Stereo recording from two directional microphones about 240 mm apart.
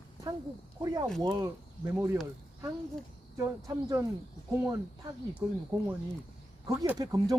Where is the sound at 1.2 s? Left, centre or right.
Centre.